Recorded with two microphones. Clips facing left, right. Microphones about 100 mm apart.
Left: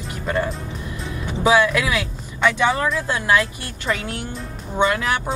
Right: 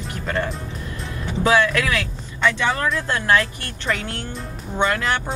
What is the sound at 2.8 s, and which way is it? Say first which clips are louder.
Speech: even; 5° left (ahead or behind).